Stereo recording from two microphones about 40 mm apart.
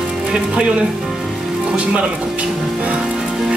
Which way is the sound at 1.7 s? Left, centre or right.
Right.